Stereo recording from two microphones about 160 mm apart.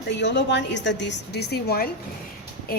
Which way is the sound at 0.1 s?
90° left.